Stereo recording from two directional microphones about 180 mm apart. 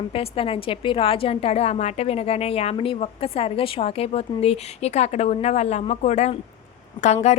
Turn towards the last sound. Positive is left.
turn(degrees=40)  # may be behind; listen again after turning